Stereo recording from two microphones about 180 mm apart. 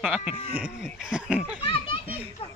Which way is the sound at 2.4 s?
30° left (ahead or behind).